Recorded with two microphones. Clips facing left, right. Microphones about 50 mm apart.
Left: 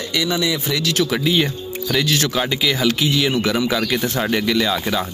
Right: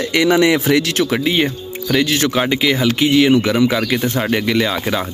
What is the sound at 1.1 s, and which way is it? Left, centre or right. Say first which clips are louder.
Speech: right 2 dB; right.